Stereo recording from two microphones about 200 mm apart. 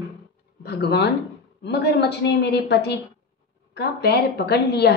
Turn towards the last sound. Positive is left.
turn(degrees=55)  # may be behind; listen again after turning